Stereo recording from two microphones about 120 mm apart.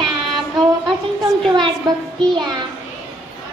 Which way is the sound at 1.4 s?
40° right (ahead or behind).